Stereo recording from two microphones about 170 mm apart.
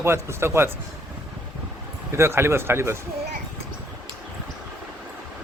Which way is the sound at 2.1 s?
15° right (ahead or behind).